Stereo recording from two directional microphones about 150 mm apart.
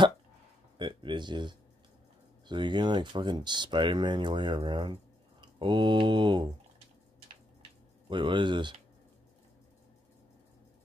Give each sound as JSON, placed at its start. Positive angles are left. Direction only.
{"t": 0.7, "sound": "speech", "side_deg": -30}
{"t": 8.1, "sound": "speech", "side_deg": -30}